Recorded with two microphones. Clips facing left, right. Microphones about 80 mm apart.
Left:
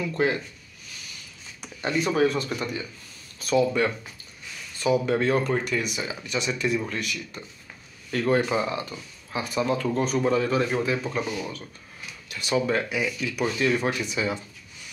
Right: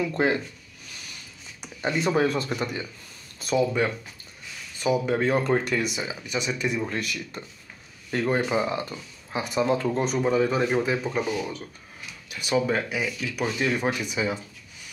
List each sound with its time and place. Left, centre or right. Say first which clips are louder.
0.0 s speech: right 1 dB; right
1.6 s a sound: right 1 dB; centre
2.0 s speech: left 1 dB; right
3.5 s speech: left 1 dB; centre
5.5 s speech: right 2 dB; right
5.9 s speech: even; right
6.3 s speech: left 1 dB; centre
6.9 s speech: right 1 dB; right
8.1 s speech: left 1 dB; right